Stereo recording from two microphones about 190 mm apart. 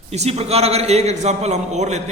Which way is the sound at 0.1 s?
35° right (ahead or behind).